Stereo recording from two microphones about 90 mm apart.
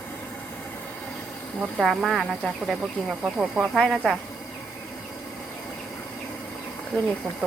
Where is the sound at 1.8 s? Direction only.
5° right (ahead or behind).